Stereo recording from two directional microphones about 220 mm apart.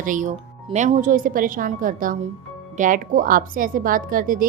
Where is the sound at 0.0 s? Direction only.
35° right (ahead or behind).